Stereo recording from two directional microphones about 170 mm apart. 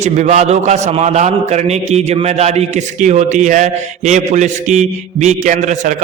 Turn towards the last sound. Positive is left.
turn(degrees=-45)  # may be behind; listen again after turning